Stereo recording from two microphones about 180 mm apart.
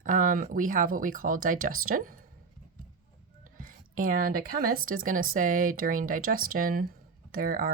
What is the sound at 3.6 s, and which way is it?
Speech, 50° right (ahead or behind).